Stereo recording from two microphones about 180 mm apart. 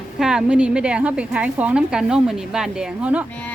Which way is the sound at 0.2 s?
5° right (ahead or behind).